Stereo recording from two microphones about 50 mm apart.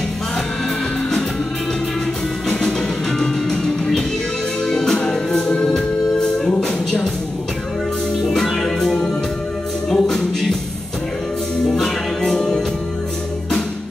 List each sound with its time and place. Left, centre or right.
2.5 s music: centre
8.3 s music: centre
11.6 s music: centre